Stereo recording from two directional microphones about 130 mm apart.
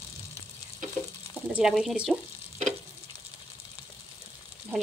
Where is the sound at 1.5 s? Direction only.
5° right (ahead or behind).